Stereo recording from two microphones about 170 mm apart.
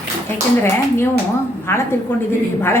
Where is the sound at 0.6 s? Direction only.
15° left (ahead or behind).